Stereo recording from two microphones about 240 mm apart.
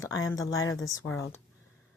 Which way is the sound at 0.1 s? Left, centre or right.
Left.